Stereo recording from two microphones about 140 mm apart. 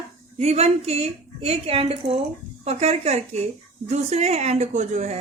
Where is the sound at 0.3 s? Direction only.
50° right (ahead or behind).